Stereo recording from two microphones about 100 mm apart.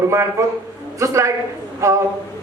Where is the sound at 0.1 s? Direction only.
30° right (ahead or behind).